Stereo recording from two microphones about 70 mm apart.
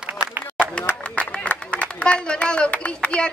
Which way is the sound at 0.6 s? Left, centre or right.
Centre.